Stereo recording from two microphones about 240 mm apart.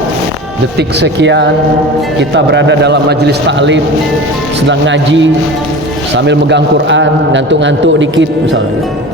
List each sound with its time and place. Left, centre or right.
0.8 s a man's voice: right